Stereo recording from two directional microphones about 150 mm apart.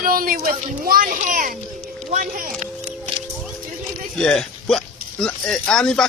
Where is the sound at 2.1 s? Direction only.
55° right (ahead or behind).